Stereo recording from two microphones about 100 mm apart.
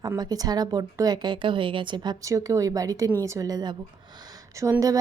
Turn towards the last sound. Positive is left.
turn(degrees=-30)  # may be behind; listen again after turning